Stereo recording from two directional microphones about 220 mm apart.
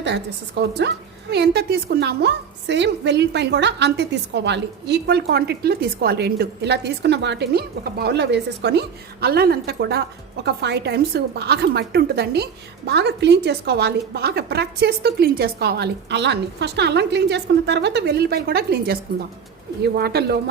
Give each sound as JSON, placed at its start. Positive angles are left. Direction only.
{"t": 0.6, "sound": "a woman's voice", "side_deg": -50}